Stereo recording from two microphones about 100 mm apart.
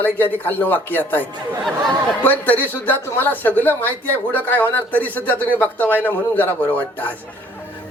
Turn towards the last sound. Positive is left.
turn(degrees=20)  # may be behind; listen again after turning